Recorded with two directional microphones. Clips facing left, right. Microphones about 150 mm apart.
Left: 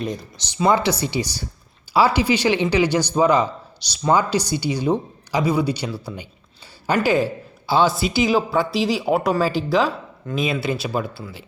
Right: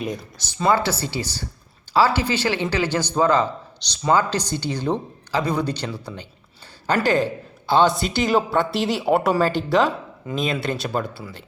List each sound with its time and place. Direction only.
0.5 s speech: 15° left (ahead or behind)